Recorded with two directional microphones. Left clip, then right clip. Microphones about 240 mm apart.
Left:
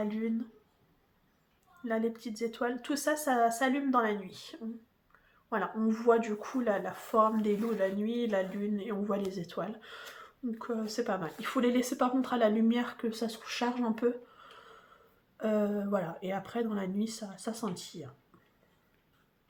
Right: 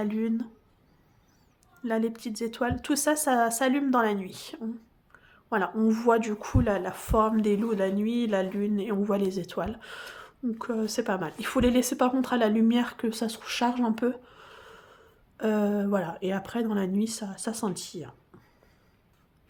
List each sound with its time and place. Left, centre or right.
0.0 s a woman's voice: right
1.8 s a woman's voice: right